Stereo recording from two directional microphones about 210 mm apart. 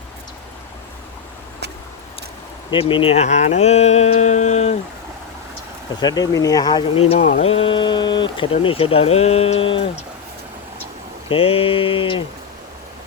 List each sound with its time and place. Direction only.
2.6 s speech: 25° left (ahead or behind)
6.0 s speech: 20° left (ahead or behind)
7.1 s speech: 35° left (ahead or behind)
11.3 s speech: 25° left (ahead or behind)